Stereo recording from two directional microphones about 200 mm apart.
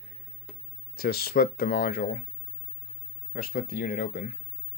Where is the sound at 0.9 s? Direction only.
50° left (ahead or behind).